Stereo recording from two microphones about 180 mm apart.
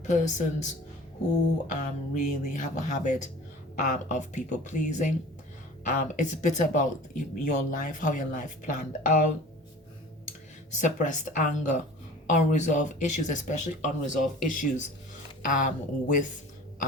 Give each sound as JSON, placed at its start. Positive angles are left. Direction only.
{"t": 0.0, "sound": "speech", "side_deg": 40}
{"t": 10.8, "sound": "speech", "side_deg": 45}